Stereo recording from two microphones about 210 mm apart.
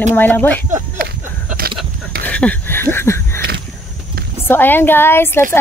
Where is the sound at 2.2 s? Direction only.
5° left (ahead or behind).